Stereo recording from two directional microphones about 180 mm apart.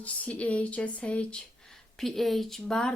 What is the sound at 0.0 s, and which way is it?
Speech, 10° left (ahead or behind).